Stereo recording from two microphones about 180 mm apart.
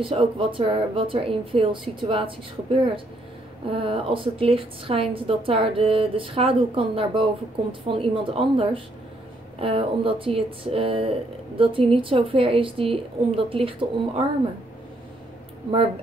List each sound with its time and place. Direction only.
0.0 s speech: 30° right (ahead or behind)